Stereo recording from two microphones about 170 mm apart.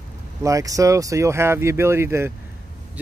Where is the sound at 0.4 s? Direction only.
20° right (ahead or behind).